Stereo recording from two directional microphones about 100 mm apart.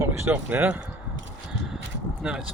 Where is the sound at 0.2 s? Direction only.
20° right (ahead or behind).